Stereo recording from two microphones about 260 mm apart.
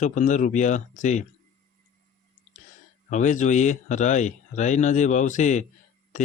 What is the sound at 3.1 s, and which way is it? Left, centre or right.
Speech, left.